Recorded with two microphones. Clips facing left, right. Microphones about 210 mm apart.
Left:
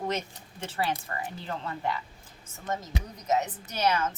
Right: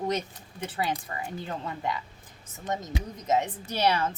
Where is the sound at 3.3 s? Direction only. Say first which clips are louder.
Right 1 dB; 30° right (ahead or behind).